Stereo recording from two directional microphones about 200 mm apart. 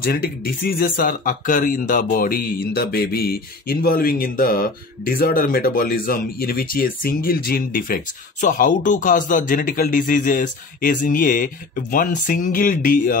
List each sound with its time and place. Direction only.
0.0 s speech: 50° left (ahead or behind)